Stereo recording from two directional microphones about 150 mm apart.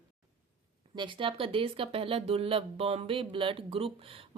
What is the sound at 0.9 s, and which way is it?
Speech, 35° right (ahead or behind).